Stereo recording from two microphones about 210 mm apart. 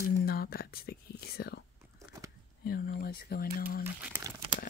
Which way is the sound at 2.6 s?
45° left (ahead or behind).